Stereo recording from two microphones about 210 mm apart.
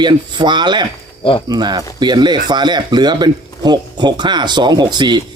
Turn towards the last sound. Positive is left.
turn(degrees=-20)  # may be behind; listen again after turning